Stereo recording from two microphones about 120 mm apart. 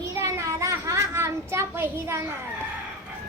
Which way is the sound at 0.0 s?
25° right (ahead or behind).